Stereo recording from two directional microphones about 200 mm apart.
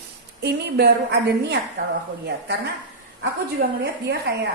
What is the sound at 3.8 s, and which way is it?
Speech, 55° right (ahead or behind).